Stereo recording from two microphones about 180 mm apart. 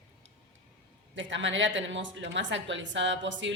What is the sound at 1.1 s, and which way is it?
A woman's voice, 90° right.